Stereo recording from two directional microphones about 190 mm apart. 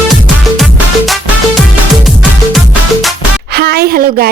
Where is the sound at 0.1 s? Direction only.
Centre (ahead or behind).